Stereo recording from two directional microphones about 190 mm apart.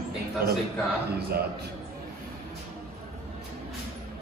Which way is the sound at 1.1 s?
55° right (ahead or behind).